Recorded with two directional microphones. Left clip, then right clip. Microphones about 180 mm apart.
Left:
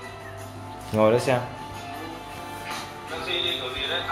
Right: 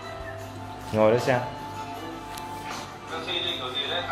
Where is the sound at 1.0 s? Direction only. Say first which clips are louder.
Left 1 dB; 15° left (ahead or behind).